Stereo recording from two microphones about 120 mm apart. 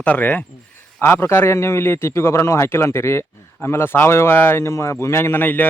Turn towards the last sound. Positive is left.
turn(degrees=15)  # may be behind; listen again after turning